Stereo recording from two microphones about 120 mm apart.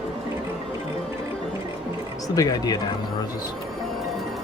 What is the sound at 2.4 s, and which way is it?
Speech, 35° left (ahead or behind).